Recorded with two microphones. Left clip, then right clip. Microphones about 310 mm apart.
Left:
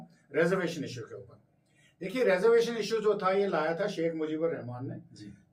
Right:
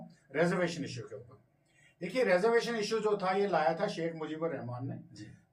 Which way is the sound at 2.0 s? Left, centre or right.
Centre.